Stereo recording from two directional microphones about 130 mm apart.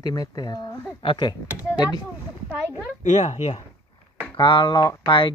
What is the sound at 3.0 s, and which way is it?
Speech, 65° left (ahead or behind).